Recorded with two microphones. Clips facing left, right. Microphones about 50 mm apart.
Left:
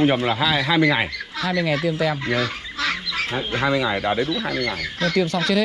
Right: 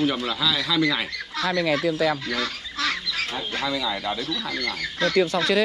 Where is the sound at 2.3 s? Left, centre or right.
Centre.